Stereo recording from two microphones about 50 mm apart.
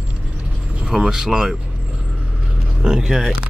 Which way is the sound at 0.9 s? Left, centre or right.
Centre.